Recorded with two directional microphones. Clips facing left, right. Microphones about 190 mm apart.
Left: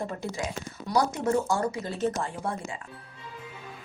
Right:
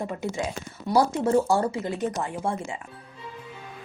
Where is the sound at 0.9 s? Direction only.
30° right (ahead or behind).